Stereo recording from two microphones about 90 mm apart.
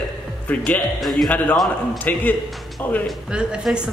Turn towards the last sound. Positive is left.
turn(degrees=-10)  # may be behind; listen again after turning